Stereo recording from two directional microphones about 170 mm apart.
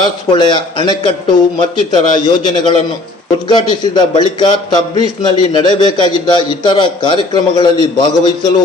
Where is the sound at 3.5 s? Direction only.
25° left (ahead or behind).